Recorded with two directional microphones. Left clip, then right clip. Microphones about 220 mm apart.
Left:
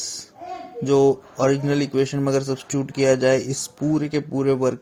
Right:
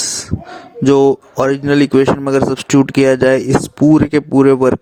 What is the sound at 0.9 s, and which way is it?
Speech, 50° right (ahead or behind).